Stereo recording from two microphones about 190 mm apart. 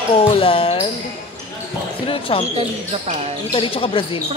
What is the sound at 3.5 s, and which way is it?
Speech, 30° left (ahead or behind).